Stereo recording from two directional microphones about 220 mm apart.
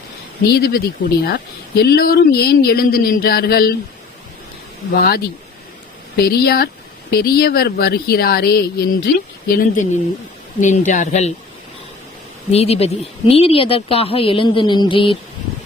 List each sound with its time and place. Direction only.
0.4 s speech: 45° left (ahead or behind)
4.9 s speech: 45° left (ahead or behind)
6.2 s speech: 45° left (ahead or behind)
12.5 s speech: 30° left (ahead or behind)